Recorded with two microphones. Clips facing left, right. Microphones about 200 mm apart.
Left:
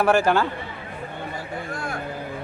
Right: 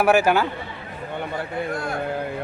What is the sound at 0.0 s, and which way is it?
Speech, 10° right (ahead or behind).